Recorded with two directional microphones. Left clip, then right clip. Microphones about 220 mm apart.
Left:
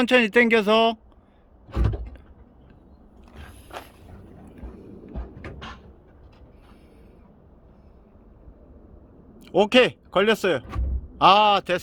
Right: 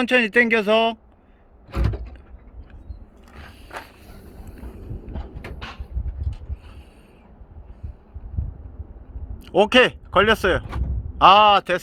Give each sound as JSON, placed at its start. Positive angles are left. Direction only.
{"t": 0.0, "sound": "speech", "side_deg": 15}
{"t": 9.4, "sound": "a man's voice", "side_deg": 5}